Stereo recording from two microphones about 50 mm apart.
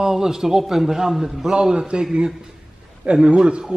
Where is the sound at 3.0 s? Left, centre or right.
Centre.